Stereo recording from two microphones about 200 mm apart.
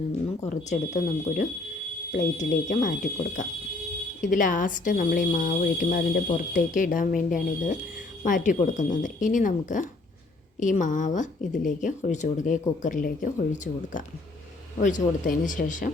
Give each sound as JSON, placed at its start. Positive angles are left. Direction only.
{"t": 0.7, "sound": "a woman's voice", "side_deg": 40}